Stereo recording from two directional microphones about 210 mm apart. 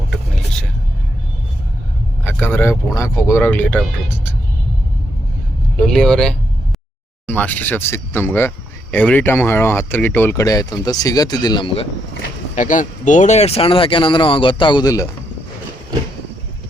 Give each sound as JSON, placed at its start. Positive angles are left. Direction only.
{"t": 2.2, "sound": "speech", "side_deg": 10}
{"t": 5.8, "sound": "speech", "side_deg": 5}
{"t": 12.5, "sound": "speech", "side_deg": 35}